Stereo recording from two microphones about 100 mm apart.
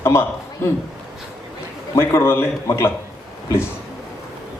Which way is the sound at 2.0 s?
25° left (ahead or behind).